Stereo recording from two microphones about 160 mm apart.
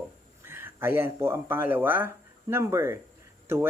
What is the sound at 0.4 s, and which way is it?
Speech, 15° right (ahead or behind).